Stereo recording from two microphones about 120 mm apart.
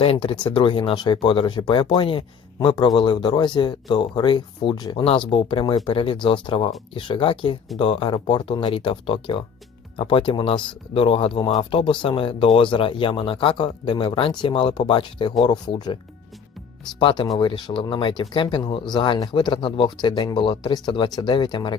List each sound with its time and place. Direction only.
0.0 s speech: 50° left (ahead or behind)
5.0 s speech: 50° left (ahead or behind)
17.0 s speech: 45° left (ahead or behind)